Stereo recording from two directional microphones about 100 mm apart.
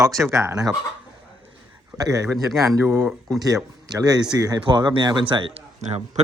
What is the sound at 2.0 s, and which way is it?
Speech, 35° right (ahead or behind).